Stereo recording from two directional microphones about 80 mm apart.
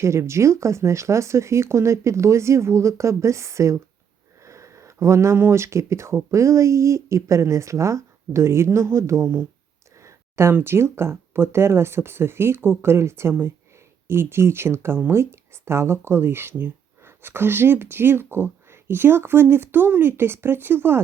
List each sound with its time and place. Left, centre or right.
0.0 s speech: right